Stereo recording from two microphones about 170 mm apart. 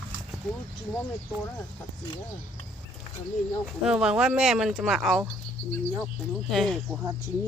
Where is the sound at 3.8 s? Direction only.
5° right (ahead or behind).